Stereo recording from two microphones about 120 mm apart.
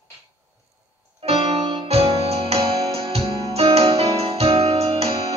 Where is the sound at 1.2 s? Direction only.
55° right (ahead or behind).